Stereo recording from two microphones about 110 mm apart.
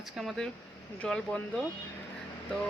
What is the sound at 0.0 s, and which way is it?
Speech, centre (ahead or behind).